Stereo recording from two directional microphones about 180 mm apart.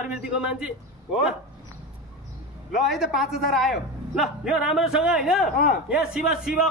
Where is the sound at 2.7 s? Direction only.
Centre (ahead or behind).